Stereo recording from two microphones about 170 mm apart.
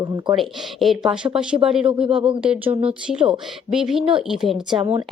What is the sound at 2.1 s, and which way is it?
Speech, 30° right (ahead or behind).